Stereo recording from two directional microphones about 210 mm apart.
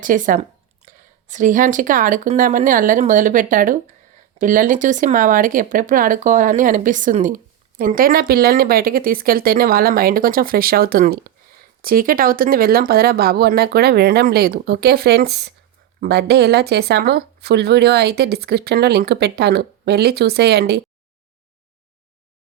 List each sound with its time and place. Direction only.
0.0 s speech: 40° right (ahead or behind)